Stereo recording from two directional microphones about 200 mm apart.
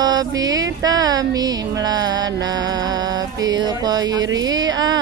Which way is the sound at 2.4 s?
20° right (ahead or behind).